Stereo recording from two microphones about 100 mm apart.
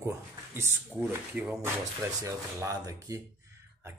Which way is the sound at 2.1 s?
35° right (ahead or behind).